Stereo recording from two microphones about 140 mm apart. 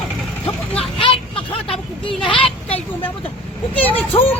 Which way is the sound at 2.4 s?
40° left (ahead or behind).